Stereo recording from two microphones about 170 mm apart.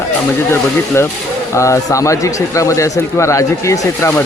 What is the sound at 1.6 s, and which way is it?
Speech, 20° left (ahead or behind).